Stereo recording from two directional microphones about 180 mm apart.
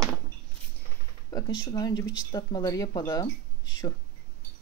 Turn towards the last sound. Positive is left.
turn(degrees=20)  # may be behind; listen again after turning